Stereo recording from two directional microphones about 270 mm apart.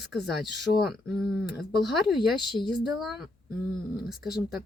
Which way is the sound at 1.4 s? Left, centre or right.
Centre.